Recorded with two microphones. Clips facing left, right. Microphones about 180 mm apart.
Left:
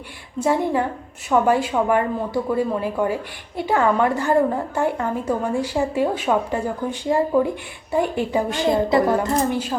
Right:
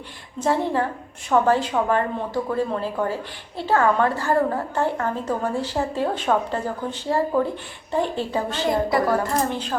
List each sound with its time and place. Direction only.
0.3 s a woman's voice: 10° left (ahead or behind)
9.5 s a woman's voice: 10° left (ahead or behind)